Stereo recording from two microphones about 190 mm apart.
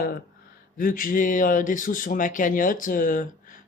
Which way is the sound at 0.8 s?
45° left (ahead or behind).